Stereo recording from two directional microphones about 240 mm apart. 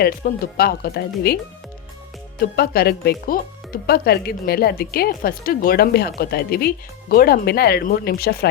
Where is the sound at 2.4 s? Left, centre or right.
Left.